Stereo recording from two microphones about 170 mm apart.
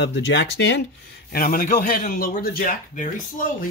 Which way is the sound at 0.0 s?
90° left.